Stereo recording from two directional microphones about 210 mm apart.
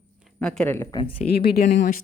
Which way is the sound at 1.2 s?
50° left (ahead or behind).